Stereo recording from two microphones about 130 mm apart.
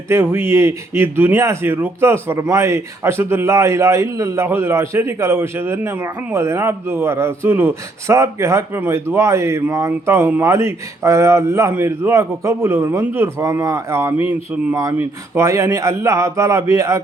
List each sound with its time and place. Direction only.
0.1 s speech: 20° right (ahead or behind)
14.3 s a sound: 15° right (ahead or behind)
14.8 s speech: 25° right (ahead or behind)